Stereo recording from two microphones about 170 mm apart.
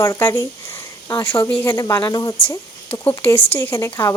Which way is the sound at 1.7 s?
20° left (ahead or behind).